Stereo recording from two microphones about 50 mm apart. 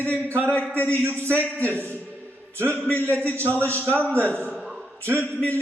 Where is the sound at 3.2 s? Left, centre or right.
Left.